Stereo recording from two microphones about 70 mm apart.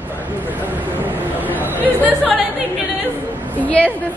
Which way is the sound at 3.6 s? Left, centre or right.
Left.